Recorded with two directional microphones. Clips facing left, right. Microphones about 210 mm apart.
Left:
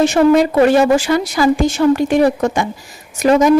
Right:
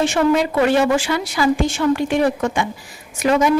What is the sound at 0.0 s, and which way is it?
A woman's voice, 40° left (ahead or behind).